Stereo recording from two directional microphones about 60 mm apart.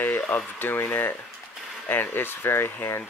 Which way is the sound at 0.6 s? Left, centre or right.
Left.